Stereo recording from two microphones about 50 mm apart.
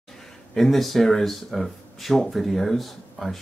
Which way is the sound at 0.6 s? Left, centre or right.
Centre.